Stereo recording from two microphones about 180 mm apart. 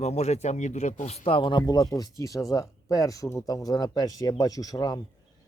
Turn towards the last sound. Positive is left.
turn(degrees=20)  # may be behind; listen again after turning